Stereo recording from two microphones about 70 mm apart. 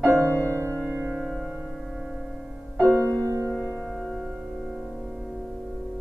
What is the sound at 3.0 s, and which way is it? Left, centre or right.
Music, left.